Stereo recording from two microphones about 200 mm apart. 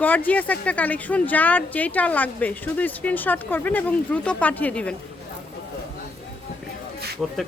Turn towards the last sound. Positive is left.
turn(degrees=-5)  # may be behind; listen again after turning